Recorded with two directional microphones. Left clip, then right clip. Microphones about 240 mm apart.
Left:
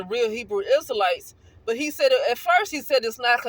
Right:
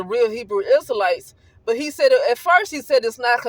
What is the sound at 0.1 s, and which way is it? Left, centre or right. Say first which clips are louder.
A woman's voice: right 5 dB; right.